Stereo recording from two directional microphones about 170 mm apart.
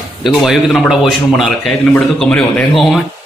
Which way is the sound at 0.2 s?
Centre (ahead or behind).